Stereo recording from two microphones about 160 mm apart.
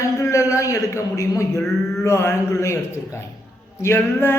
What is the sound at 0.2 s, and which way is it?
A man's voice, 20° left (ahead or behind).